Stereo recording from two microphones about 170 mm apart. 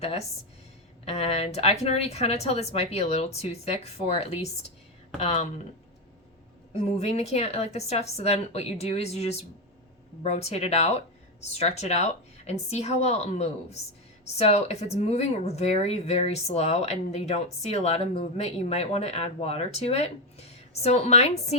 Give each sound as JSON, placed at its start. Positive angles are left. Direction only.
{"t": 0.0, "sound": "speech", "side_deg": 40}
{"t": 6.9, "sound": "speech", "side_deg": 40}